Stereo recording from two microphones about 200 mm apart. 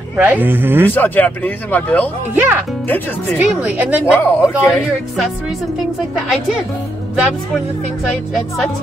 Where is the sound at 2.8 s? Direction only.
10° left (ahead or behind).